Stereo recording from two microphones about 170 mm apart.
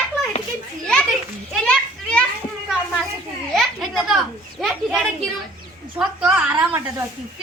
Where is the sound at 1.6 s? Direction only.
5° left (ahead or behind).